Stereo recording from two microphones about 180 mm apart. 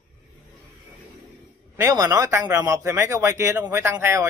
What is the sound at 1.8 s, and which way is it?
Speech, 20° right (ahead or behind).